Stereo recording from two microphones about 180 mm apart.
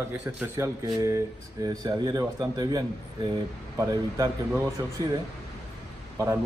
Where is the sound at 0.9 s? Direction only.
20° right (ahead or behind).